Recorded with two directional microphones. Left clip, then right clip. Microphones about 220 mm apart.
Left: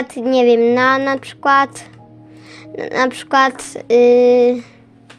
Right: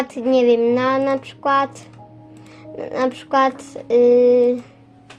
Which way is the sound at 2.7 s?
30° left (ahead or behind).